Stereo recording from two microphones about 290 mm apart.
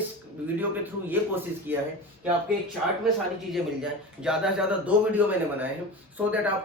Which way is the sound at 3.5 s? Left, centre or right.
Centre.